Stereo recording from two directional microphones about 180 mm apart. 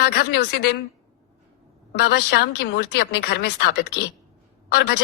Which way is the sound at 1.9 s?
60° left (ahead or behind).